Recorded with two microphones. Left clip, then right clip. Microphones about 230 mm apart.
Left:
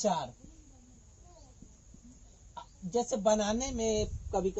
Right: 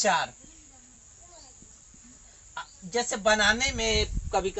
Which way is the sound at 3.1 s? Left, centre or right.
Right.